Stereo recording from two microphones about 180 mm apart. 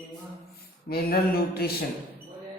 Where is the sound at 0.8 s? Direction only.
60° left (ahead or behind).